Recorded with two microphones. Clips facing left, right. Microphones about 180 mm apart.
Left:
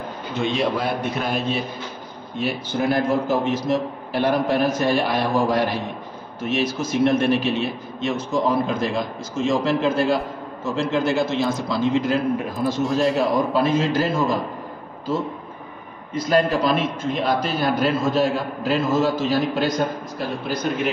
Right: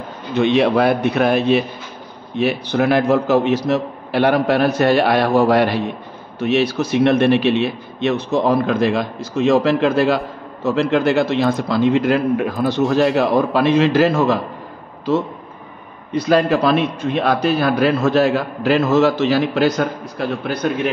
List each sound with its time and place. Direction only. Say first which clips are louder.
0.3 s a man's voice: right 8 dB; 70° right (ahead or behind)
16.1 s a man's voice: right 4 dB; 75° right (ahead or behind)